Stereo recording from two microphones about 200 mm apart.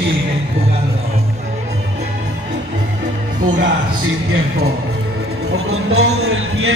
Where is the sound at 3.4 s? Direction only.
70° right (ahead or behind).